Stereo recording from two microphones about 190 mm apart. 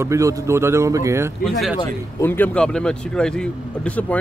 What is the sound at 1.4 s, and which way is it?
Speech, centre (ahead or behind).